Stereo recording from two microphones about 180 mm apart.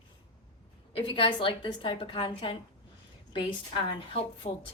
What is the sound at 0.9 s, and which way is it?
A woman's voice, 30° left (ahead or behind).